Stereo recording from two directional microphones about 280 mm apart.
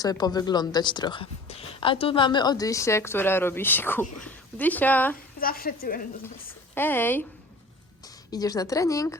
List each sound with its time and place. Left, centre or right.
0.0 s a woman's voice: centre
5.4 s speech: left
6.7 s a woman's voice: centre